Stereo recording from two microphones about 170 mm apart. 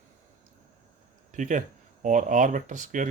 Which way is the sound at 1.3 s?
50° right (ahead or behind).